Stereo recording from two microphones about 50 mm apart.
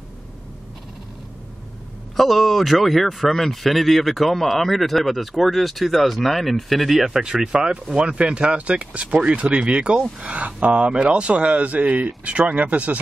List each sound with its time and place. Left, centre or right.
2.1 s speech: centre; by 13.0 s right